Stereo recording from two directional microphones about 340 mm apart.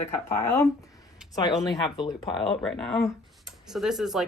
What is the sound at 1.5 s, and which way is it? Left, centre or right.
Speech, centre.